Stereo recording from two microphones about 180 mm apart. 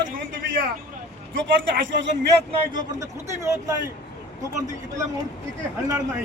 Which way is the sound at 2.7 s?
20° right (ahead or behind).